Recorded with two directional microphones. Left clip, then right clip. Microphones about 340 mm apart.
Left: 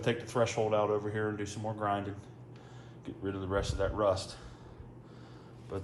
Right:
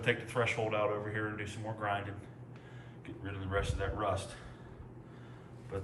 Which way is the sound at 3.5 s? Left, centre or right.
Centre.